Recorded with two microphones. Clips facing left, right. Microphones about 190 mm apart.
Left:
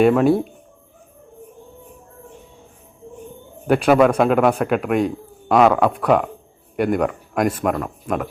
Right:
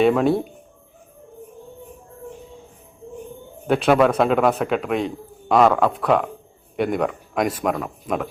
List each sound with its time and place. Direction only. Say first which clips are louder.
0.0 s speech: left 3 dB; 5° left (ahead or behind)
3.7 s speech: left 2 dB; centre (ahead or behind)